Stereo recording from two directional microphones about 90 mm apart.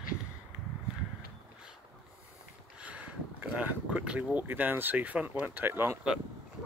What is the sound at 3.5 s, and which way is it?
Speech, 15° right (ahead or behind).